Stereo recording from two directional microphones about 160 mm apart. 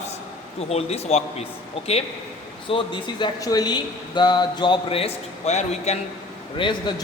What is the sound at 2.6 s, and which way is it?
Speech, 30° left (ahead or behind).